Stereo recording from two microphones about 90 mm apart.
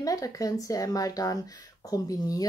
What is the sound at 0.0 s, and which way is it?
Speech, 40° left (ahead or behind).